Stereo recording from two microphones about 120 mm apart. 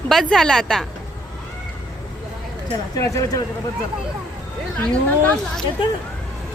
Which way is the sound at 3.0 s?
25° left (ahead or behind).